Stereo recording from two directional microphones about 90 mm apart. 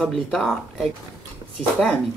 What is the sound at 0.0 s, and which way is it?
Speech, 5° left (ahead or behind).